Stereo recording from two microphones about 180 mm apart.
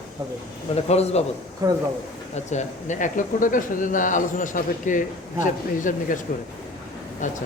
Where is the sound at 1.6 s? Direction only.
20° right (ahead or behind).